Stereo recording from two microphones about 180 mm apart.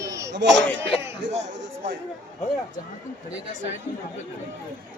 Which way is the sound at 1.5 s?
80° right.